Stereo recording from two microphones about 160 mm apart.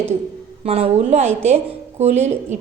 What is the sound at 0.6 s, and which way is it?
A woman's voice, 40° right (ahead or behind).